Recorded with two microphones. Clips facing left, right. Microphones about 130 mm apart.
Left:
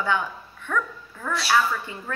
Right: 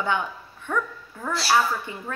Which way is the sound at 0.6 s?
15° right (ahead or behind).